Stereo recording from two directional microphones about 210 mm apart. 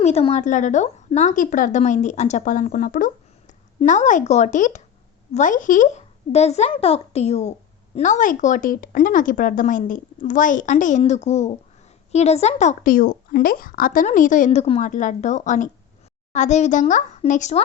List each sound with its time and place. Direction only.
0.0 s a woman's voice: 30° left (ahead or behind)